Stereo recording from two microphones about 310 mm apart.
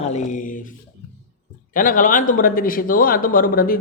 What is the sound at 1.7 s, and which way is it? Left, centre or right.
Speech, left.